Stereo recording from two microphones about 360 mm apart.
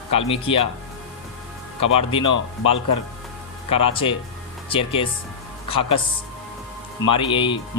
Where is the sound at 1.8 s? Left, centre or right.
Centre.